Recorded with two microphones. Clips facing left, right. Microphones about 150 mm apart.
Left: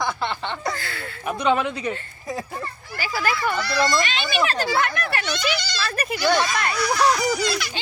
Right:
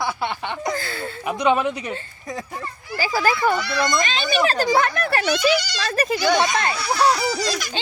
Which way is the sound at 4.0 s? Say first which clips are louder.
Right 2 dB; 40° right (ahead or behind).